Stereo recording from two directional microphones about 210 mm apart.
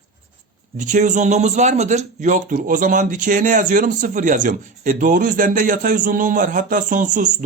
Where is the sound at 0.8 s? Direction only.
35° right (ahead or behind).